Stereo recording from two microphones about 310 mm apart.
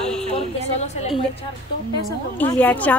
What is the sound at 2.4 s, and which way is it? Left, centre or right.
Speech, centre.